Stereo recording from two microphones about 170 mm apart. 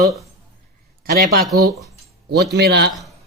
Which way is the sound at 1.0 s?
60° right (ahead or behind).